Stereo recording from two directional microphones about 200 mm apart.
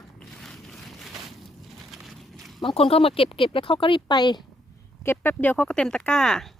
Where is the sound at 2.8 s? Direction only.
30° left (ahead or behind).